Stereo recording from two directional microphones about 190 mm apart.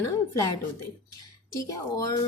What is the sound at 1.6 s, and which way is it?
Speech, 20° left (ahead or behind).